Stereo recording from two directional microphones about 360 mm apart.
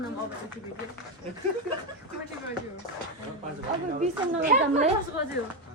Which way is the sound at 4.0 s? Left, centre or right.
Centre.